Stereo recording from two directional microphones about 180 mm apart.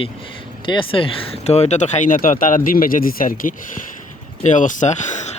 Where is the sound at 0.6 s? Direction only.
30° left (ahead or behind).